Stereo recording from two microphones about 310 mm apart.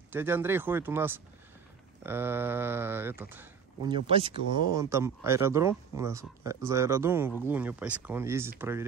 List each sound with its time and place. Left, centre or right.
0.1 s speech: centre
4.4 s speech: left
4.7 s speech: centre